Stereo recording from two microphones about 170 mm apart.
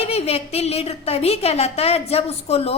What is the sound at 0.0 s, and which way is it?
A woman's voice, 35° left (ahead or behind).